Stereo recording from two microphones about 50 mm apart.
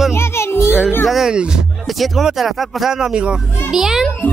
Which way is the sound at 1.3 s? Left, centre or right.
Centre.